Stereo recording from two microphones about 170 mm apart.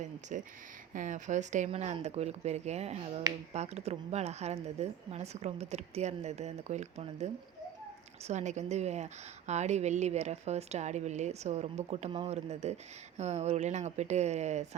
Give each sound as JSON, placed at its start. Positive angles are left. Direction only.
{"t": 0.0, "sound": "speech", "side_deg": -45}